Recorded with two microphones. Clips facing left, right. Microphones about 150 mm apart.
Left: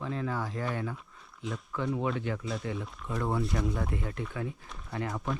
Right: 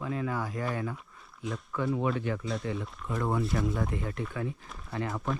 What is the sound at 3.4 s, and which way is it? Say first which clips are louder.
Speech: right 1 dB; centre (ahead or behind).